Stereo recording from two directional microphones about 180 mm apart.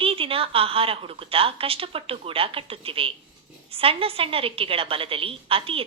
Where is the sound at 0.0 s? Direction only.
30° right (ahead or behind).